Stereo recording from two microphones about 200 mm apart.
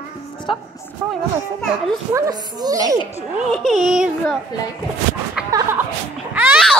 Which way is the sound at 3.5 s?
Centre (ahead or behind).